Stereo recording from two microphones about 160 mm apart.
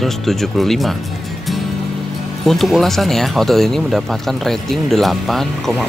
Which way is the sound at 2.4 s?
Centre (ahead or behind).